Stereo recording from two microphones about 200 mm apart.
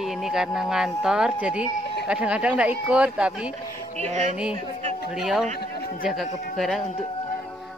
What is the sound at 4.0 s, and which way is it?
Speech, 35° right (ahead or behind).